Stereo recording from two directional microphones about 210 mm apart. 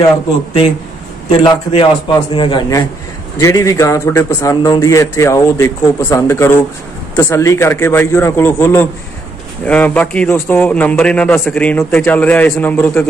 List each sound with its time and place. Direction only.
1.4 s a man's voice: 25° left (ahead or behind); by 13.0 s 10° left (ahead or behind)